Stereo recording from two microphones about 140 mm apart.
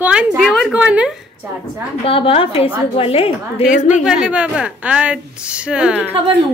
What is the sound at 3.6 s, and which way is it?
A woman's voice, 5° right (ahead or behind).